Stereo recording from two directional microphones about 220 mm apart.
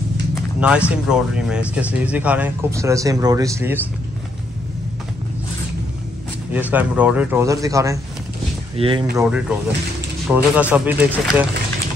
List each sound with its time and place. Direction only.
0.6 s speech: 5° right (ahead or behind)
6.5 s speech: 5° right (ahead or behind); by 9.0 s 25° right (ahead or behind)
9.1 s speech: 5° right (ahead or behind)